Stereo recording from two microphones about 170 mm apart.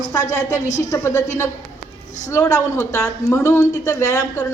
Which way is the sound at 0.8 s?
20° left (ahead or behind).